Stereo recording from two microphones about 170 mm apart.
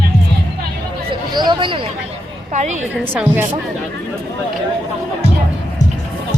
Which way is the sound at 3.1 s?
10° right (ahead or behind).